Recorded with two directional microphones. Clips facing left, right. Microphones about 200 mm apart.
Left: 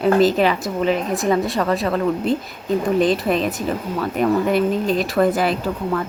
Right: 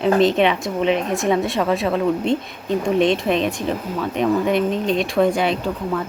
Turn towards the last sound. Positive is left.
turn(degrees=0)  # may be behind; listen again after turning